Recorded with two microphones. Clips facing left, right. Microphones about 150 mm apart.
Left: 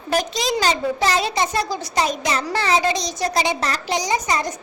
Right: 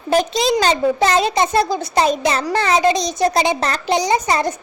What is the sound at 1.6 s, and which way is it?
Speech, 25° right (ahead or behind).